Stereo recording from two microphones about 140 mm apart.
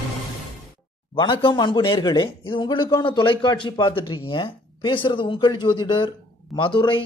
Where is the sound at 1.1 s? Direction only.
35° left (ahead or behind).